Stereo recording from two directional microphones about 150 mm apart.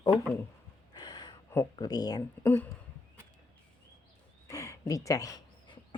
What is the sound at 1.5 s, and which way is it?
Speech, 20° left (ahead or behind).